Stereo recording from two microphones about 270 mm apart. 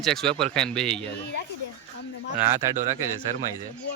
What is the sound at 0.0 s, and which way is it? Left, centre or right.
Speech, centre.